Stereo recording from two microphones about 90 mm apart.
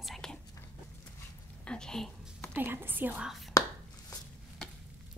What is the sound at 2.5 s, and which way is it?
Speech, 25° right (ahead or behind).